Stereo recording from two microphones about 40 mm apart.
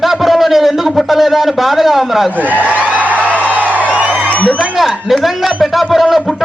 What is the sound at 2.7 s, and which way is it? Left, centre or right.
Music, right.